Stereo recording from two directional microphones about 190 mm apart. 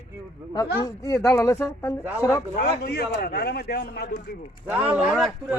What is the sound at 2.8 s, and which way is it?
A man's voice, 55° left (ahead or behind).